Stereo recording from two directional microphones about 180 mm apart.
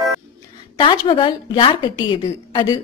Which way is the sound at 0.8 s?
30° left (ahead or behind).